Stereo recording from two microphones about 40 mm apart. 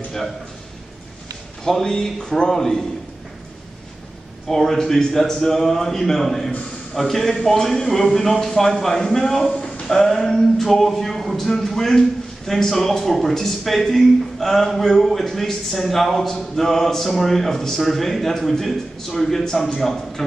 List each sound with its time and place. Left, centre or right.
1.6 s speech: centre
4.5 s a man's voice: centre
9.5 s a sound: left
9.8 s a man's voice: centre